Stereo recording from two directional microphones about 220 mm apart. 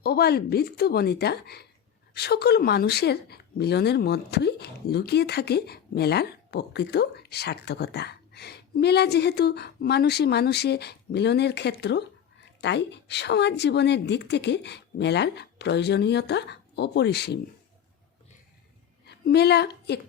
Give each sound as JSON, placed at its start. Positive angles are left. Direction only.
{"t": 0.0, "sound": "speech", "side_deg": 45}
{"t": 19.0, "sound": "a woman's voice", "side_deg": 50}